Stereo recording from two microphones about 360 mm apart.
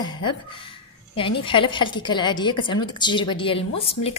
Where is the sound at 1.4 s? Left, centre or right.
Centre.